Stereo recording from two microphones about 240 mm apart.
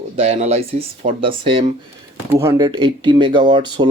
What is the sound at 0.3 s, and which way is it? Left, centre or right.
Speech, right.